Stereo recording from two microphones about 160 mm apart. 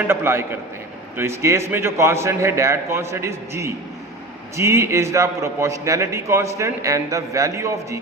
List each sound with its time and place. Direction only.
0.1 s a man's voice: 15° right (ahead or behind)